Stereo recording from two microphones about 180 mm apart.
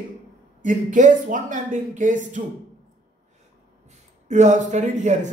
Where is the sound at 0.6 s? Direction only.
45° right (ahead or behind).